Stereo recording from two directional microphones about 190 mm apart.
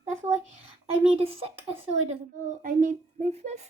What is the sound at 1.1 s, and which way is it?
Speech, 30° right (ahead or behind).